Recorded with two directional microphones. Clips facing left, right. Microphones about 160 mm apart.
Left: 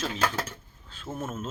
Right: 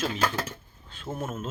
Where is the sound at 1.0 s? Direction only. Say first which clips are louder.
Right 1 dB; 10° right (ahead or behind).